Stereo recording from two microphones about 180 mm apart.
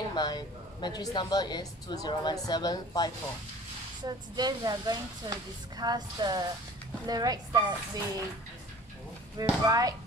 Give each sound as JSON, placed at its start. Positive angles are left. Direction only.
{"t": 0.1, "sound": "speech", "side_deg": 25}
{"t": 4.0, "sound": "speech", "side_deg": -25}
{"t": 9.4, "sound": "speech", "side_deg": -20}